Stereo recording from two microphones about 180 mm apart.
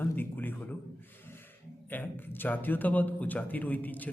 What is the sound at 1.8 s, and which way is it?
A man's voice, 10° left (ahead or behind).